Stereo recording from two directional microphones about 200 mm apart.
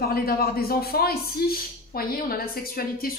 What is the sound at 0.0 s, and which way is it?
Speech, 50° left (ahead or behind).